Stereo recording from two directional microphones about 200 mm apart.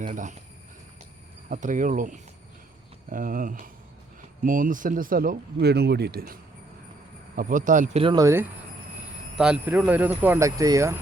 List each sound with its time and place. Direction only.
0.0 s speech: 40° right (ahead or behind)
1.5 s speech: 40° right (ahead or behind)
8.0 s speech: 20° right (ahead or behind)